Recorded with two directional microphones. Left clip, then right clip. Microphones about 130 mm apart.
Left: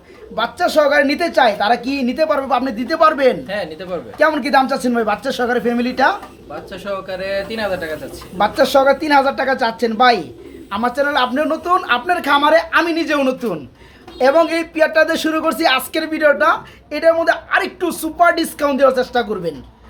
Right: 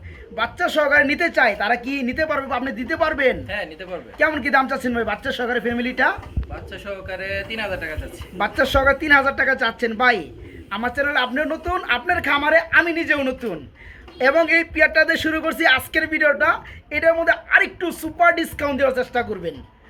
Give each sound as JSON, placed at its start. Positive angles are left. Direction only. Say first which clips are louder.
{"t": 0.3, "sound": "speech", "louder": "left 5 dB", "side_deg": 0}
{"t": 3.4, "sound": "speech", "louder": "left 4 dB", "side_deg": 40}
{"t": 3.9, "sound": "speech", "louder": "left 5 dB", "side_deg": 0}
{"t": 6.8, "sound": "speech", "louder": "left 6 dB", "side_deg": 40}
{"t": 8.4, "sound": "speech", "louder": "left 6 dB", "side_deg": 0}